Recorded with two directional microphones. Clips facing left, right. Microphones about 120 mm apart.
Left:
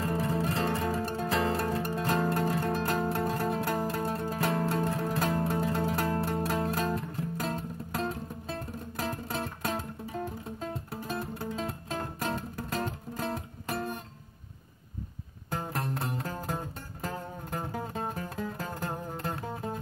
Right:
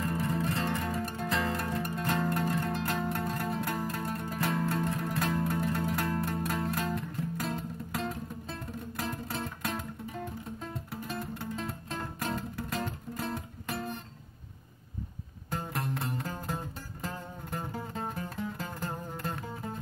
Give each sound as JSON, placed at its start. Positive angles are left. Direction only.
{"t": 0.0, "sound": "zither", "side_deg": 35}
{"t": 3.5, "sound": "music", "side_deg": 40}
{"t": 10.1, "sound": "music", "side_deg": 55}
{"t": 10.9, "sound": "music", "side_deg": 40}
{"t": 15.5, "sound": "music", "side_deg": 40}
{"t": 18.3, "sound": "music", "side_deg": 45}